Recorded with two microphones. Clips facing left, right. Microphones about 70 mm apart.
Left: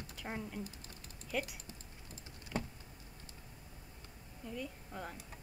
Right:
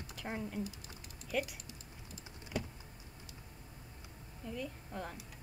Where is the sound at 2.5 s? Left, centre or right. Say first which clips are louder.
Even; left.